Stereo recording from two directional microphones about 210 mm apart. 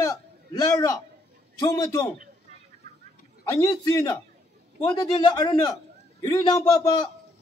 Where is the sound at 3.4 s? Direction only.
20° left (ahead or behind).